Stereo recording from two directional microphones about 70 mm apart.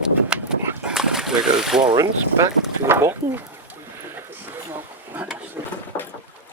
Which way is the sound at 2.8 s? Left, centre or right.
Right.